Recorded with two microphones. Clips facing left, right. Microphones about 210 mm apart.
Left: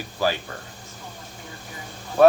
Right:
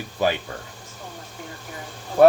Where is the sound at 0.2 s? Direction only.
20° right (ahead or behind).